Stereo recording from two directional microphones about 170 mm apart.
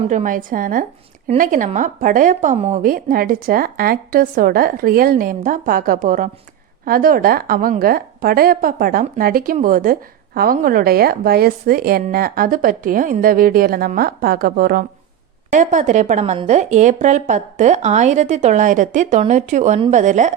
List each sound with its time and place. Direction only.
0.0 s a woman's voice: 45° right (ahead or behind)
15.4 s a woman's voice: 45° right (ahead or behind)